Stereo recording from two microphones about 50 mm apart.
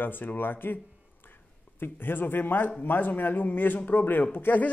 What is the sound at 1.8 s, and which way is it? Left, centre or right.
Speech, left.